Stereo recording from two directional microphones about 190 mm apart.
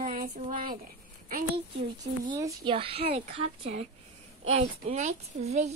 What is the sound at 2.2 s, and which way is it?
Speech, 20° right (ahead or behind).